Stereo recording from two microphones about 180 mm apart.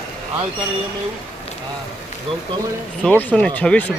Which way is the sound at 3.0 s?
5° left (ahead or behind).